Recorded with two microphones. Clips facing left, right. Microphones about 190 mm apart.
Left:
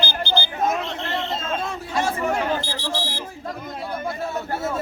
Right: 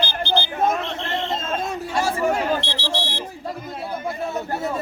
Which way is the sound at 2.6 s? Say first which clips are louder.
Right 1 dB; 70° right (ahead or behind).